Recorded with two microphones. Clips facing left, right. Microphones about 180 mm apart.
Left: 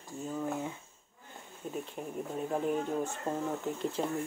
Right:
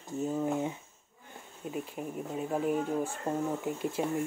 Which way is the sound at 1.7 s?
5° right (ahead or behind).